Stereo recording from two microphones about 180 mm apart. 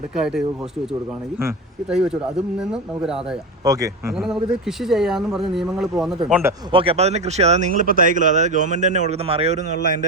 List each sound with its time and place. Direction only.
0.2 s speech: 5° right (ahead or behind)
1.9 s speech: 5° right (ahead or behind)
3.6 s speech: 20° right (ahead or behind)
4.6 s speech: centre (ahead or behind)
6.7 s speech: 30° right (ahead or behind)